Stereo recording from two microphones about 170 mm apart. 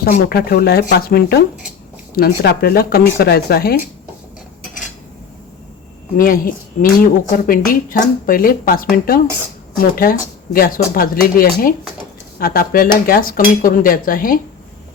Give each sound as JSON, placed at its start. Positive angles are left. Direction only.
{"t": 0.0, "sound": "speech", "side_deg": 65}
{"t": 6.1, "sound": "speech", "side_deg": 55}